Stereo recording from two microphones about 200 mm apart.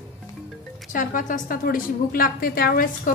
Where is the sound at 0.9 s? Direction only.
40° left (ahead or behind).